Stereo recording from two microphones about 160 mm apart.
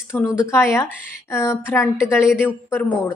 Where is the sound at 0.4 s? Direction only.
15° left (ahead or behind).